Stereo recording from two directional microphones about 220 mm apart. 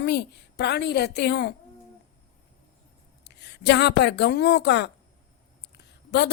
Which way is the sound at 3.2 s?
50° left (ahead or behind).